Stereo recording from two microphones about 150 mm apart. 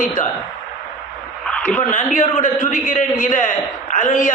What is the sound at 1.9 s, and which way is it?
A man's voice, 55° left (ahead or behind).